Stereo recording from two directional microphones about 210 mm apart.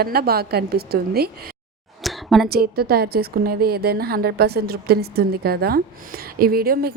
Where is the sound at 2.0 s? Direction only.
Centre (ahead or behind).